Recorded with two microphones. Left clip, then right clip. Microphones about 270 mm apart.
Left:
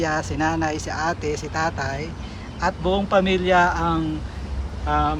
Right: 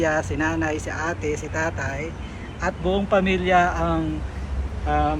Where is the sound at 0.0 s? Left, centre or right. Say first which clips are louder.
Right 1 dB; centre.